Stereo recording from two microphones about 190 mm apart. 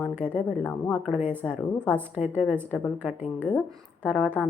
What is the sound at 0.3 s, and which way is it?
Speech, 5° left (ahead or behind).